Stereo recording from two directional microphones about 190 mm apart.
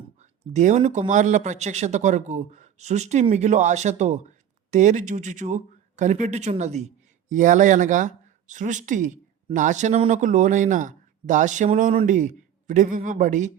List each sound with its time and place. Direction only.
0.2 s speech: 40° right (ahead or behind)